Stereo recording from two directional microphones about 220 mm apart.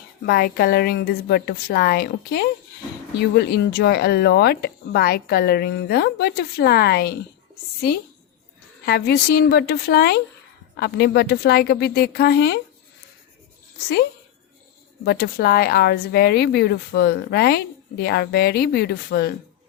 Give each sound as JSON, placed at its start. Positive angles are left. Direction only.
{"t": 0.3, "sound": "speech", "side_deg": 45}
{"t": 8.9, "sound": "speech", "side_deg": 45}
{"t": 15.0, "sound": "speech", "side_deg": 45}